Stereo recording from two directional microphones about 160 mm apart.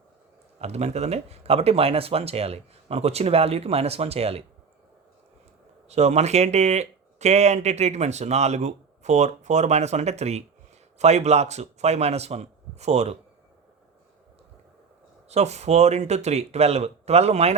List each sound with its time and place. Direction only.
0.6 s speech: 40° right (ahead or behind)
5.9 s speech: 45° right (ahead or behind)
15.3 s speech: 45° right (ahead or behind)